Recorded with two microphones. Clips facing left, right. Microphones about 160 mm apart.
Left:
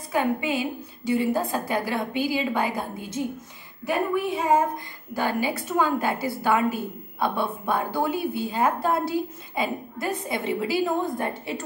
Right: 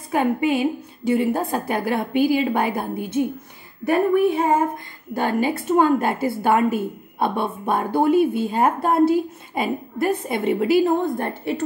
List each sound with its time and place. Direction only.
0.1 s a woman's voice: 50° right (ahead or behind)
3.9 s child singing: 60° right (ahead or behind)
5.1 s a woman's voice: 55° right (ahead or behind)